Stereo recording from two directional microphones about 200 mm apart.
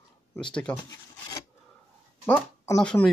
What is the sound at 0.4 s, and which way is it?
Speech, 5° left (ahead or behind).